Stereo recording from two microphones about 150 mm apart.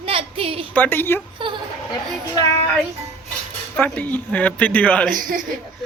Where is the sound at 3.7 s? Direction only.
10° left (ahead or behind).